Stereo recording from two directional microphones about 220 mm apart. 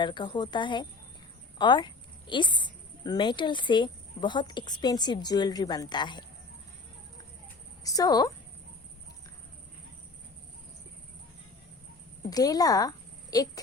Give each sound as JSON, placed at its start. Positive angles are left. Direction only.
{"t": 0.0, "sound": "a woman's voice", "side_deg": 20}
{"t": 7.9, "sound": "speech", "side_deg": 15}
{"t": 12.3, "sound": "speech", "side_deg": 15}